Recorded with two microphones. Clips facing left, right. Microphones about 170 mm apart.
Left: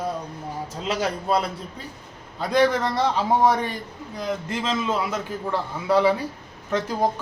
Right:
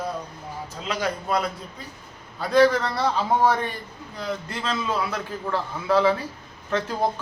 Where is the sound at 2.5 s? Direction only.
20° left (ahead or behind).